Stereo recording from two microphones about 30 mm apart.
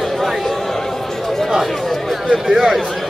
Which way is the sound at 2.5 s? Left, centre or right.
Centre.